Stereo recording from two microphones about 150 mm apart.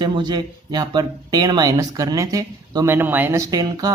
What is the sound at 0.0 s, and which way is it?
Speech, 30° right (ahead or behind).